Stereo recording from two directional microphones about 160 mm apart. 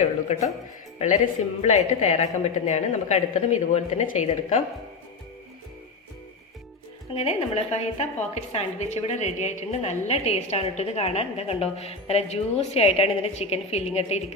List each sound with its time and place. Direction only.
0.9 s a woman's voice: 50° left (ahead or behind)
7.1 s a woman's voice: 40° left (ahead or behind)